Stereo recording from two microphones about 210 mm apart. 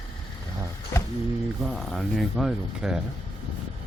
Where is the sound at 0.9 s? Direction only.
15° left (ahead or behind).